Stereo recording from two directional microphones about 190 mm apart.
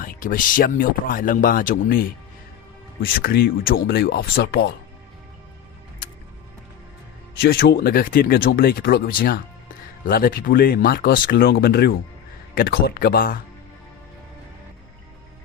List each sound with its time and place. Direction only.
0.0 s speech: 45° left (ahead or behind)
7.4 s speech: 55° left (ahead or behind)